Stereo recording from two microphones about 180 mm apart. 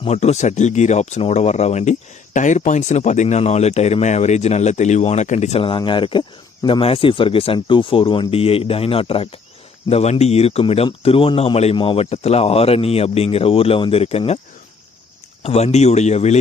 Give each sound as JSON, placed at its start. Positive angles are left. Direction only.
{"t": 0.0, "sound": "speech", "side_deg": 40}
{"t": 15.4, "sound": "speech", "side_deg": 35}